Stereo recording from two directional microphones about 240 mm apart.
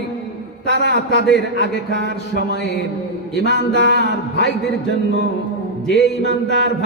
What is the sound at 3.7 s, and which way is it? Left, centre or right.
Mantra, right.